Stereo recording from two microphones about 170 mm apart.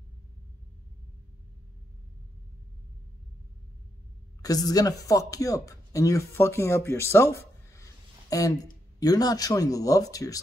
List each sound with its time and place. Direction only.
4.4 s speech: 20° left (ahead or behind)